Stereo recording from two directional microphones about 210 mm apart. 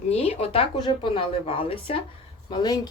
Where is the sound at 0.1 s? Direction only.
30° left (ahead or behind).